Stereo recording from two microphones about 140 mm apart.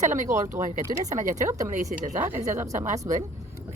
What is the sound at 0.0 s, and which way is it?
Speech, 60° right (ahead or behind).